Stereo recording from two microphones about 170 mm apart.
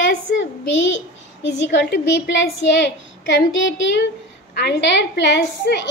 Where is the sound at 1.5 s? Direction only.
90° left.